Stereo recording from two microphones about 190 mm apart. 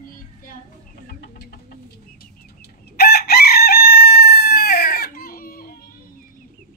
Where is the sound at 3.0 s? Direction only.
55° left (ahead or behind).